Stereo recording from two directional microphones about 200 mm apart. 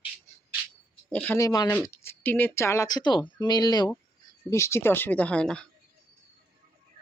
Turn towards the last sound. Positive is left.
turn(degrees=5)  # may be behind; listen again after turning